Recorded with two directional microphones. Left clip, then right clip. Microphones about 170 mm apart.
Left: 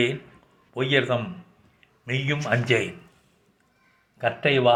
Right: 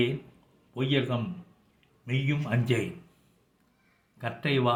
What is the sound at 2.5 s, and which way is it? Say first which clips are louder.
Speech: left 8 dB; 35° right (ahead or behind).